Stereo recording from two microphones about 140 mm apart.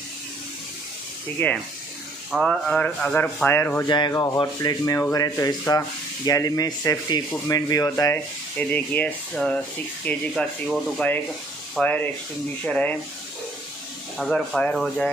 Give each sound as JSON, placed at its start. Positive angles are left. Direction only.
{"t": 1.4, "sound": "rub", "side_deg": 10}
{"t": 2.3, "sound": "speech", "side_deg": 0}
{"t": 3.4, "sound": "rub", "side_deg": 15}
{"t": 3.8, "sound": "rub", "side_deg": 35}
{"t": 4.1, "sound": "speech", "side_deg": 25}
{"t": 10.0, "sound": "rub", "side_deg": 5}
{"t": 14.1, "sound": "speech", "side_deg": 5}